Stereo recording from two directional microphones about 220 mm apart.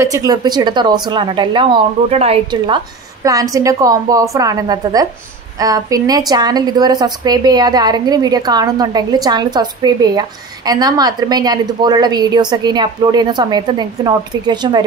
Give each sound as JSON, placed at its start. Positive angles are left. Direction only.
{"t": 0.0, "sound": "a woman's voice", "side_deg": -15}